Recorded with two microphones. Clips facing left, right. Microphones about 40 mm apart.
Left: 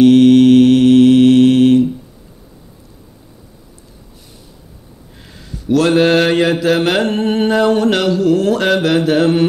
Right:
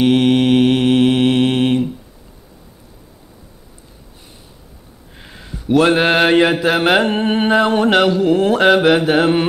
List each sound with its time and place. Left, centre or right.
0.0 s mantra: centre
5.1 s mantra: right